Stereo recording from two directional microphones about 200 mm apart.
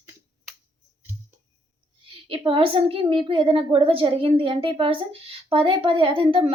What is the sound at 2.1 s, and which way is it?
A woman's voice, 25° right (ahead or behind).